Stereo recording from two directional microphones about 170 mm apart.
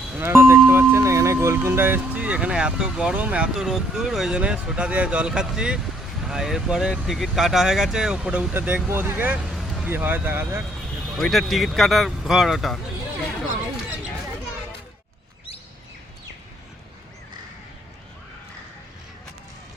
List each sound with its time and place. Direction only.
0.2 s speech: 15° right (ahead or behind)
11.2 s speech: centre (ahead or behind)